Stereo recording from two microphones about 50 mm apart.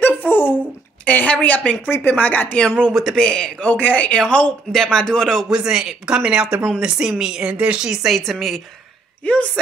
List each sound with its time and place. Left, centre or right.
0.0 s a sound: left
1.0 s a woman's voice: left
1.9 s speech: left
2.9 s a woman's voice: centre
3.2 s speech: centre
3.6 s a woman's voice: left
4.7 s speech: centre
5.5 s a woman's voice: centre
9.2 s a woman's voice: left